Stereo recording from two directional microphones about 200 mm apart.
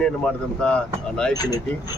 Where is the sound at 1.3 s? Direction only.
20° left (ahead or behind).